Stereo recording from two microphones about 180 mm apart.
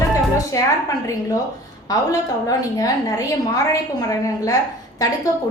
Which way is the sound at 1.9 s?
20° left (ahead or behind).